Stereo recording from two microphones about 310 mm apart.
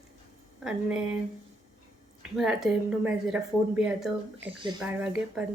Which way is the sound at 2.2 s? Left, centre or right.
Centre.